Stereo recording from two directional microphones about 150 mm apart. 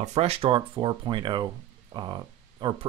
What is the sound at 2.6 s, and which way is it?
Speech, 30° right (ahead or behind).